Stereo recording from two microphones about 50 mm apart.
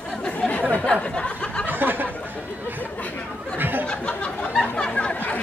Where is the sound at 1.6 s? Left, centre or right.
Right.